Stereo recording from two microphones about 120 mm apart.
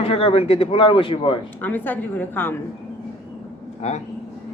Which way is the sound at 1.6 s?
15° left (ahead or behind).